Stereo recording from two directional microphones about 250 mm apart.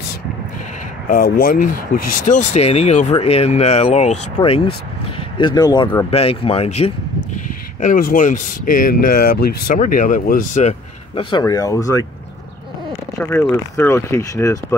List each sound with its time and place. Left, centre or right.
1.0 s speech: left
2.0 s speech: left
2.3 s speech: left
13.2 s speech: centre